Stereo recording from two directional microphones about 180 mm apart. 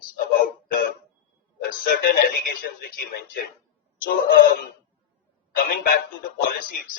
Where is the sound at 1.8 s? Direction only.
50° left (ahead or behind).